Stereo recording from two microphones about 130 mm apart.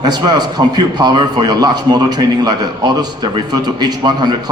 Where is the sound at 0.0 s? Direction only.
30° right (ahead or behind).